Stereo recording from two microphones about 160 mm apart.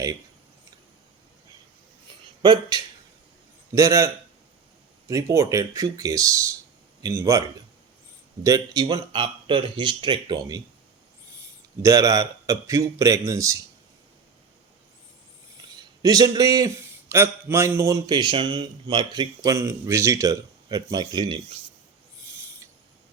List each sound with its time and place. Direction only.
2.4 s a man's voice: 25° right (ahead or behind)
8.4 s a man's voice: 20° right (ahead or behind)
11.8 s a man's voice: 20° right (ahead or behind)
15.7 s a man's voice: 25° right (ahead or behind)